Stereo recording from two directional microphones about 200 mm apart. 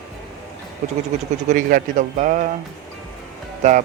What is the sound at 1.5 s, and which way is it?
A man's voice, 40° right (ahead or behind).